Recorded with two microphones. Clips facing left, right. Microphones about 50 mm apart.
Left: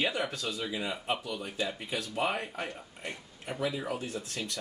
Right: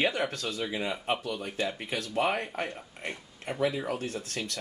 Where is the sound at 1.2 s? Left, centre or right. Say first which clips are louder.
Right 2 dB; right.